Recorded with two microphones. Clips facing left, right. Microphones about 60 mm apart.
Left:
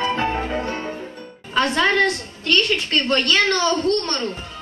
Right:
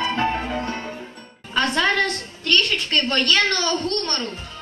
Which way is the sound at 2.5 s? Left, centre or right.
Centre.